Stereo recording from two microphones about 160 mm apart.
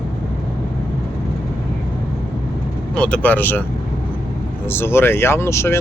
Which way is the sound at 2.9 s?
5° left (ahead or behind).